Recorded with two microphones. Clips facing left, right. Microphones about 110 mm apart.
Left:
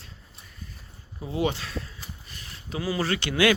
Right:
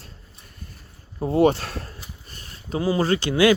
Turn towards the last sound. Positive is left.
turn(degrees=-35)  # may be behind; listen again after turning